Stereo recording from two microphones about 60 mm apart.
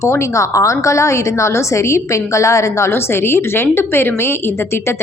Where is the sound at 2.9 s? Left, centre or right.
Left.